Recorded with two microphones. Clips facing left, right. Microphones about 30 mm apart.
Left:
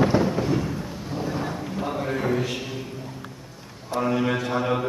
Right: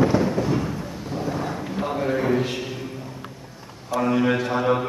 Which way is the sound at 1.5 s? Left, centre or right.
Centre.